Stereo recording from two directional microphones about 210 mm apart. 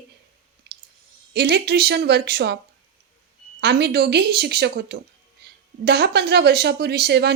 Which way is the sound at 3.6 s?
50° right (ahead or behind).